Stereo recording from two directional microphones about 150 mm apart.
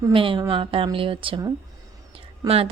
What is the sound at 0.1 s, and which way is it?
Speech, 35° right (ahead or behind).